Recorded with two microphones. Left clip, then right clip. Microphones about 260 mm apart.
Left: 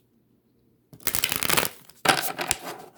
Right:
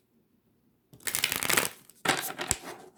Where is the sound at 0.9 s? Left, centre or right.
Left.